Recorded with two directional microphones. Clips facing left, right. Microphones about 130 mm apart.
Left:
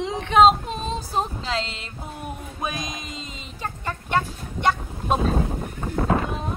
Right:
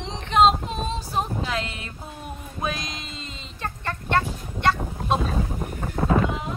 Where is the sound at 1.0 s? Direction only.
35° left (ahead or behind).